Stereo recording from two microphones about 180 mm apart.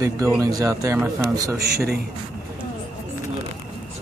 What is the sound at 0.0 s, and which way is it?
Speech, 15° right (ahead or behind).